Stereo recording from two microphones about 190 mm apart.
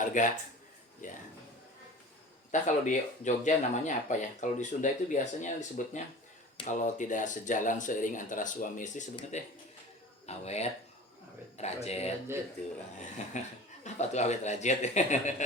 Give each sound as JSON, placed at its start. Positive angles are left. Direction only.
{"t": 0.0, "sound": "a man's voice", "side_deg": 40}
{"t": 2.5, "sound": "speech", "side_deg": 40}
{"t": 13.3, "sound": "speech", "side_deg": 40}